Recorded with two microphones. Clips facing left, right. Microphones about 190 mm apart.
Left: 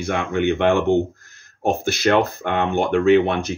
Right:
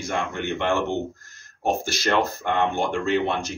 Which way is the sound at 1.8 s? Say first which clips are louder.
Left 5 dB; 60° left (ahead or behind).